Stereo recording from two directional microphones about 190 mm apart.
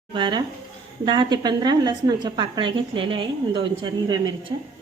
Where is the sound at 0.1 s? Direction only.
25° right (ahead or behind).